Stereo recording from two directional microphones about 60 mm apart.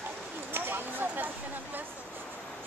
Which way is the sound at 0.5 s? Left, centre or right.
Right.